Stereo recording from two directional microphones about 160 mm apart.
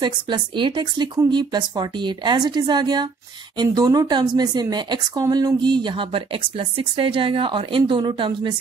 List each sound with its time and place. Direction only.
0.0 s speech: 30° right (ahead or behind)